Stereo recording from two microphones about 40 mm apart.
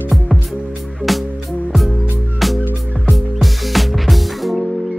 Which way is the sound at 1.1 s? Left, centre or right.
Centre.